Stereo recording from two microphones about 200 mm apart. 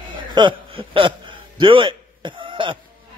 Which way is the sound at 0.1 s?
25° right (ahead or behind).